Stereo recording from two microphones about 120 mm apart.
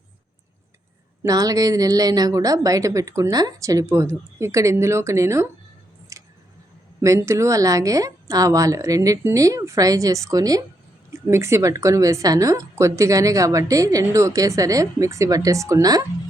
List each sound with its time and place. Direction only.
1.2 s a woman's voice: 30° right (ahead or behind)
6.1 s a sound: 25° right (ahead or behind)
7.0 s a woman's voice: 25° right (ahead or behind)